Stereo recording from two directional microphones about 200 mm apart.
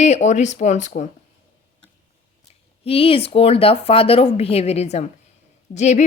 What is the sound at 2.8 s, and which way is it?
A woman's voice, 30° left (ahead or behind).